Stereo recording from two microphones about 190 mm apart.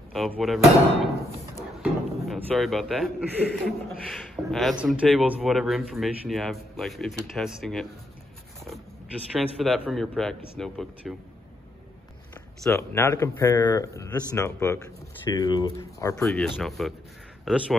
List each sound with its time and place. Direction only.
0.4 s a man's voice: centre (ahead or behind)
1.8 s a man's voice: centre (ahead or behind)
9.6 s a man's voice: centre (ahead or behind)
12.7 s speech: 15° left (ahead or behind)
16.2 s a man's voice: 5° left (ahead or behind)